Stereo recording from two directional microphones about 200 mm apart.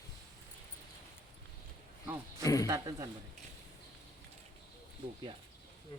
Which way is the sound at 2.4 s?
15° left (ahead or behind).